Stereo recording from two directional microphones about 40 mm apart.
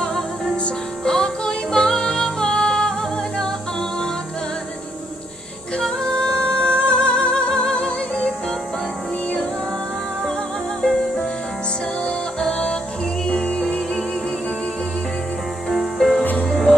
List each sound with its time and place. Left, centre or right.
1.0 s music: centre
5.8 s music: centre
10.8 s music: centre
12.4 s music: centre
15.7 s music: centre